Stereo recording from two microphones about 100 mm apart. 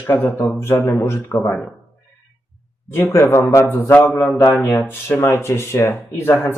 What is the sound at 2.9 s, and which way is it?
Speech, 25° left (ahead or behind).